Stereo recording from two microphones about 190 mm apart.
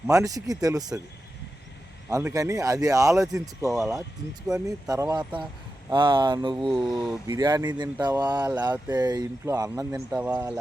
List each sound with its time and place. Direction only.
0.1 s speech: 20° right (ahead or behind)
2.0 s speech: 15° right (ahead or behind)
3.7 s speech: centre (ahead or behind)
4.5 s speech: 20° right (ahead or behind)
6.7 s speech: centre (ahead or behind)
7.3 s speech: 20° right (ahead or behind)